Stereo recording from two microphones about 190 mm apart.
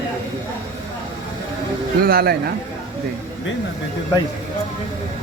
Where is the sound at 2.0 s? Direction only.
50° right (ahead or behind).